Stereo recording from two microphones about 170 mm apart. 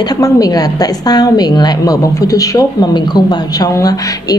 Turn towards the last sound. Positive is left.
turn(degrees=20)  # may be behind; listen again after turning